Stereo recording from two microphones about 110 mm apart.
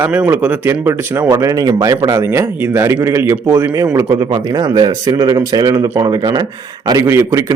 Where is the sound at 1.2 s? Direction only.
35° right (ahead or behind).